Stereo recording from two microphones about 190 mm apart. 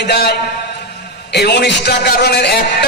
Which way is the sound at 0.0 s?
60° left (ahead or behind).